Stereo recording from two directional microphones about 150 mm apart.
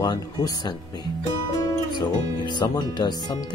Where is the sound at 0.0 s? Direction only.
25° left (ahead or behind).